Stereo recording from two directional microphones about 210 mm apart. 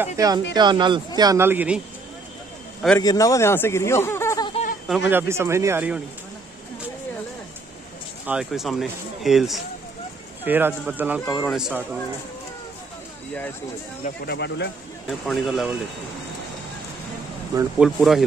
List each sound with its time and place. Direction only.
0.0 s speech: 15° right (ahead or behind)
3.0 s a man's voice: 15° left (ahead or behind)
4.8 s speech: 5° right (ahead or behind)
8.3 s speech: 5° right (ahead or behind)
14.0 s speech: 50° left (ahead or behind)
15.0 s speech: centre (ahead or behind)
17.7 s speech: centre (ahead or behind)